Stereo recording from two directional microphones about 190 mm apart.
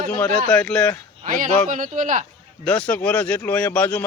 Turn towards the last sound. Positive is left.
turn(degrees=5)  # may be behind; listen again after turning